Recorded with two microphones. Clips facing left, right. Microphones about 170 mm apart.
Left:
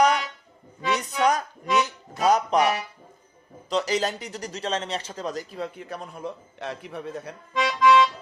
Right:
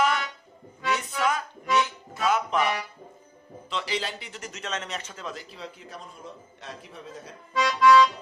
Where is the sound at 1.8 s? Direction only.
40° left (ahead or behind).